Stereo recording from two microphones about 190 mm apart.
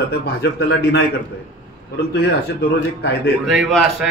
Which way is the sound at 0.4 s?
60° left (ahead or behind).